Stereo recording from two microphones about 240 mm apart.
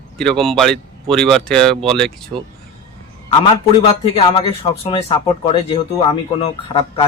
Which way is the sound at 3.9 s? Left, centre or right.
Left.